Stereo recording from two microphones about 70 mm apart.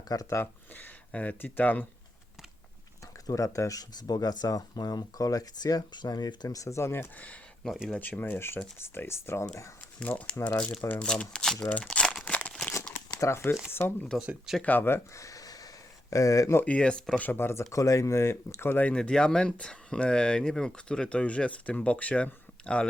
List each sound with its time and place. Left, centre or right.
0.1 s speech: left
0.7 s speech: left
3.2 s speech: left
6.7 s speech: left
10.0 s speech: centre
12.2 s crumpling: left
13.1 s speech: left
13.7 s speech: left
14.2 s speech: centre
14.6 s speech: left
16.6 s speech: centre
17.2 s speech: left
18.7 s speech: left
18.9 s speech: centre